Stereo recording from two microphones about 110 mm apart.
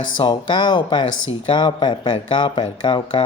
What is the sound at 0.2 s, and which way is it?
Speech, 45° left (ahead or behind).